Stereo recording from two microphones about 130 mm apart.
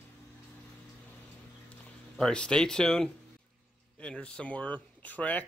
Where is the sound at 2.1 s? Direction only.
5° left (ahead or behind).